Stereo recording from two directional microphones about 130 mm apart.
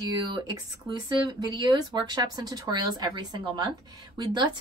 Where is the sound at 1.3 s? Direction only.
35° right (ahead or behind).